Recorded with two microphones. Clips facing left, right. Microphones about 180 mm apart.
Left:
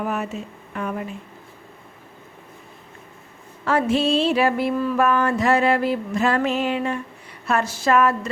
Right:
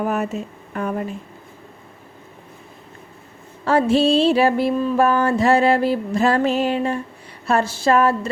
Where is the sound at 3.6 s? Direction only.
30° right (ahead or behind).